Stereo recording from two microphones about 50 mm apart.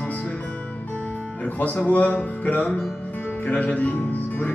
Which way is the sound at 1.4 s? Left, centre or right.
Left.